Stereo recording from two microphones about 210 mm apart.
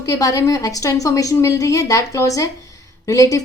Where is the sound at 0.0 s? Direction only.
15° left (ahead or behind).